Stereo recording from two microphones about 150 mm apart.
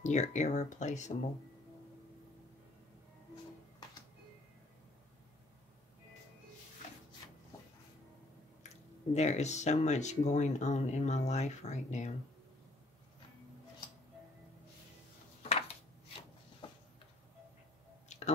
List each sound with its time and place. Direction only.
0.0 s speech: 50° left (ahead or behind)
8.6 s speech: 50° left (ahead or behind)
16.6 s a sound: 30° left (ahead or behind)
18.0 s squish: 50° left (ahead or behind)